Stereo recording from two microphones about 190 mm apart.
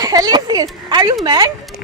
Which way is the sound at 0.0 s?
20° right (ahead or behind).